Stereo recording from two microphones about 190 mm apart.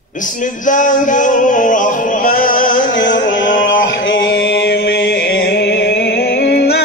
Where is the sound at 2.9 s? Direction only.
80° left.